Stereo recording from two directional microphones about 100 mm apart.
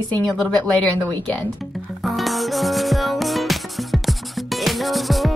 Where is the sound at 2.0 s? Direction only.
Centre (ahead or behind).